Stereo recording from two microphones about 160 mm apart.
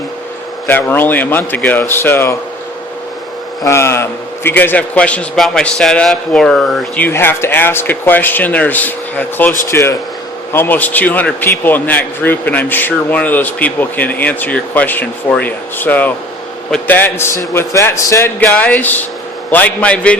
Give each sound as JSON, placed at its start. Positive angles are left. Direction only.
{"t": 0.7, "sound": "a man's voice", "side_deg": 10}
{"t": 3.6, "sound": "a man's voice", "side_deg": 15}